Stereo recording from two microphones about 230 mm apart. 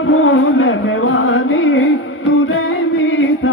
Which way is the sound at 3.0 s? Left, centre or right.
Left.